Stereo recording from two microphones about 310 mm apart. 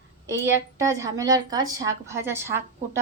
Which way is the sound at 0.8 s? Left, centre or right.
Centre.